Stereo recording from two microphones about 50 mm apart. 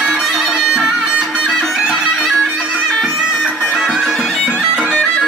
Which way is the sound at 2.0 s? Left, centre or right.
Centre.